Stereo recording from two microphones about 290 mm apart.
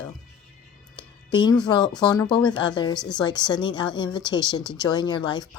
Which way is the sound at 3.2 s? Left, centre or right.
Centre.